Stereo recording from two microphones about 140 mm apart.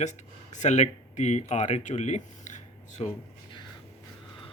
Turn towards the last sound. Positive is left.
turn(degrees=60)  # may be behind; listen again after turning